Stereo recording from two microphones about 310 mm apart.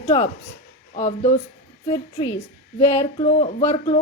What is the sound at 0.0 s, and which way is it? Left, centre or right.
Speech, centre.